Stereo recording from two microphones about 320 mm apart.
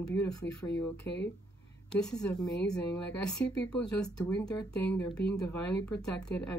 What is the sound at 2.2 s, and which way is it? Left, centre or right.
Speech, centre.